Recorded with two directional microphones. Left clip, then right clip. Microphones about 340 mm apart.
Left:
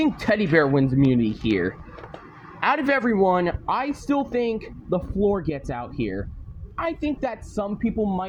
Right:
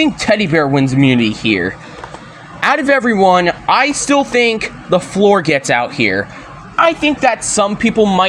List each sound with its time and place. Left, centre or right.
0.0 s speech: left
2.6 s speech: left
6.7 s speech: left
7.9 s speech: left